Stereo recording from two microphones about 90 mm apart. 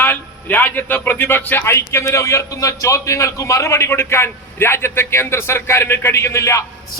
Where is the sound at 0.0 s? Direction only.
20° left (ahead or behind).